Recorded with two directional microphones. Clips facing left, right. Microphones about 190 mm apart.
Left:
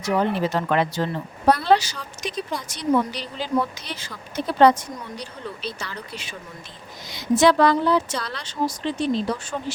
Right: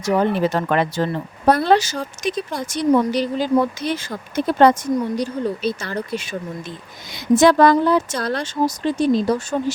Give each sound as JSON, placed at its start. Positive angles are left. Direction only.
{"t": 0.0, "sound": "speech", "side_deg": -50}